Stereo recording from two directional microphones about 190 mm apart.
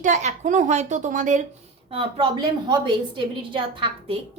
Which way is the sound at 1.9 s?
30° right (ahead or behind).